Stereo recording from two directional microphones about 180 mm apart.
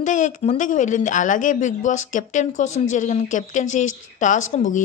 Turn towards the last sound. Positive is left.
turn(degrees=45)  # may be behind; listen again after turning